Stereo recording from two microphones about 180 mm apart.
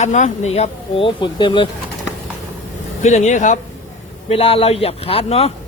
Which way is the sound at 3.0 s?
40° left (ahead or behind).